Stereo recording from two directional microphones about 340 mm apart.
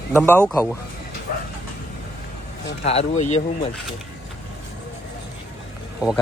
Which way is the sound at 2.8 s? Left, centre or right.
Centre.